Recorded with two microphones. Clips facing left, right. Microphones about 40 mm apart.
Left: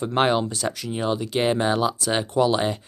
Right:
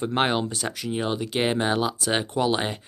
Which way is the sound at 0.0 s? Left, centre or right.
Centre.